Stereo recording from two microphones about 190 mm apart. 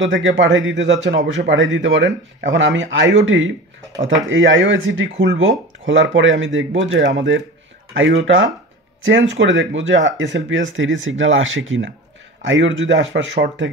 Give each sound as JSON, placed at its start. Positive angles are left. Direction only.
{"t": 0.0, "sound": "speech", "side_deg": -80}
{"t": 12.4, "sound": "speech", "side_deg": -80}